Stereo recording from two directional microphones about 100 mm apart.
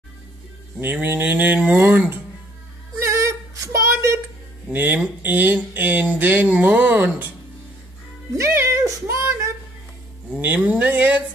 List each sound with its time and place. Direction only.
0.7 s speech: 20° right (ahead or behind)
3.0 s female singing: 30° right (ahead or behind)
4.7 s speech: 15° right (ahead or behind)
8.4 s music: 30° right (ahead or behind)
10.3 s speech: 15° right (ahead or behind)